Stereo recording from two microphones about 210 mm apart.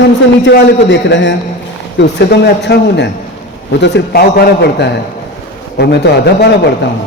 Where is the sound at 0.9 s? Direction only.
60° left (ahead or behind).